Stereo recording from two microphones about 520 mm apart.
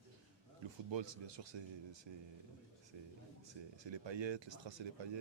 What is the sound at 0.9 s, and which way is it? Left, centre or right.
Speech, right.